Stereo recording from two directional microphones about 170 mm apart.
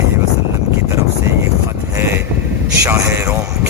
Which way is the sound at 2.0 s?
15° right (ahead or behind).